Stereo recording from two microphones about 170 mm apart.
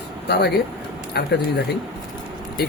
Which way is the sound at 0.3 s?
80° left.